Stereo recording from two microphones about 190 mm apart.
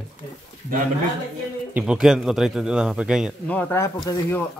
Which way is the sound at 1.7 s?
5° right (ahead or behind).